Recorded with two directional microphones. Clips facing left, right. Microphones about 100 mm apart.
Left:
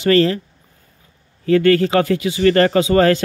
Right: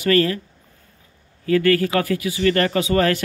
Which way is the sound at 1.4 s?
30° left (ahead or behind).